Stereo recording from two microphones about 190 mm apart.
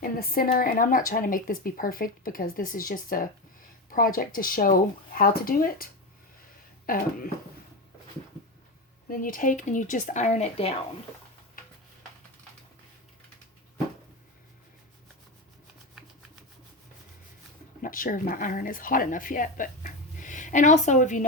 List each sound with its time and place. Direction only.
0.0 s speech: 50° left (ahead or behind)
9.0 s speech: 45° left (ahead or behind)
17.8 s speech: 45° left (ahead or behind)